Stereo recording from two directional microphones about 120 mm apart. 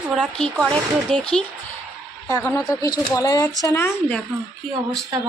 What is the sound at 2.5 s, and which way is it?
Speech, 30° left (ahead or behind).